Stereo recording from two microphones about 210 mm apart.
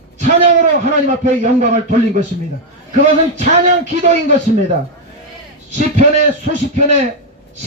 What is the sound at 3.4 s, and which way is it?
Speech, 35° right (ahead or behind).